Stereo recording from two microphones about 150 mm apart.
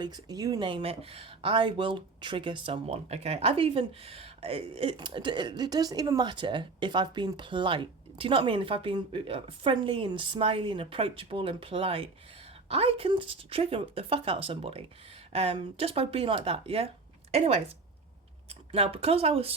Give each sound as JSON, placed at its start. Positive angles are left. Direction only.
{"t": 0.0, "sound": "speech", "side_deg": -25}
{"t": 18.7, "sound": "speech", "side_deg": -40}